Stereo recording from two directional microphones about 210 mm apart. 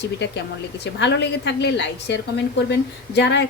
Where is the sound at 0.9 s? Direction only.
55° left (ahead or behind).